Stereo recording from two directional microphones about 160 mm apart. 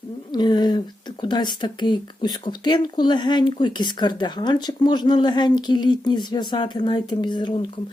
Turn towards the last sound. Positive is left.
turn(degrees=30)  # may be behind; listen again after turning